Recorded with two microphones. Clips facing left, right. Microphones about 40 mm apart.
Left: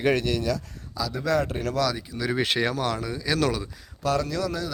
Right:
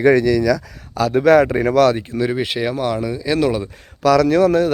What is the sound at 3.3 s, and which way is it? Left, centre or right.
Speech, right.